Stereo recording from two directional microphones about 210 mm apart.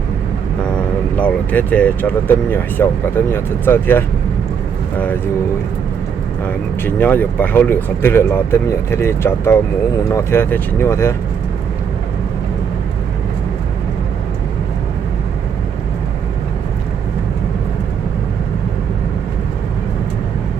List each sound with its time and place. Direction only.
1.1 s speech: 5° left (ahead or behind)
6.4 s speech: 10° left (ahead or behind)